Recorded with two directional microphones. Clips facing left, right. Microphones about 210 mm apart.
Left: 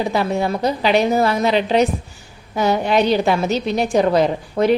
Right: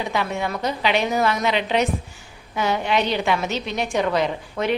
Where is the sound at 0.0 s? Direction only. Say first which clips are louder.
Left 6 dB; 35° left (ahead or behind).